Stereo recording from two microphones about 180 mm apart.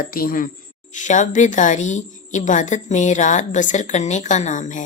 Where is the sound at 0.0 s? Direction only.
50° left (ahead or behind).